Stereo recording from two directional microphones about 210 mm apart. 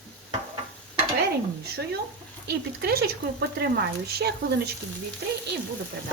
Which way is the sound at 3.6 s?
50° right (ahead or behind).